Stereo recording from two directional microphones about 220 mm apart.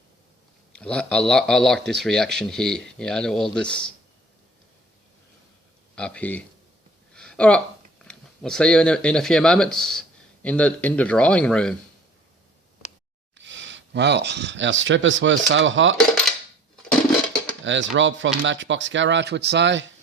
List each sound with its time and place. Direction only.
0.7 s speech: 5° left (ahead or behind)
6.0 s speech: 5° left (ahead or behind)
7.1 s a sound: 5° left (ahead or behind)
8.0 s speech: 5° left (ahead or behind)
13.4 s speech: 55° right (ahead or behind)
17.7 s speech: 55° right (ahead or behind)